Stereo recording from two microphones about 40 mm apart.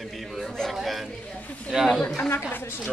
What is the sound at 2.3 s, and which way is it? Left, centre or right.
Speech, left.